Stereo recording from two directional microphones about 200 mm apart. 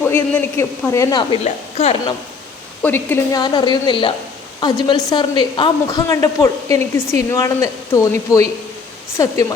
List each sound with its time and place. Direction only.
0.0 s a woman's voice: 10° left (ahead or behind)
1.5 s a woman's voice: 30° left (ahead or behind)
2.8 s a woman's voice: 10° left (ahead or behind)